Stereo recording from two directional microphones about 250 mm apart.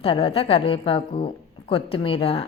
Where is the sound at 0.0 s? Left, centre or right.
Left.